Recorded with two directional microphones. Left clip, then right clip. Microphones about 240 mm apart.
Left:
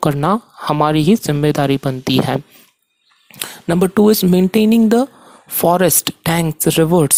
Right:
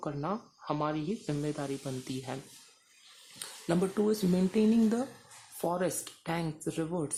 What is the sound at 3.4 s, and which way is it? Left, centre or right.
Speech, left.